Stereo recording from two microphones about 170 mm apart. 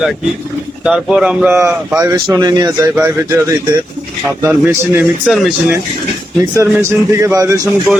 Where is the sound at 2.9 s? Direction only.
15° right (ahead or behind).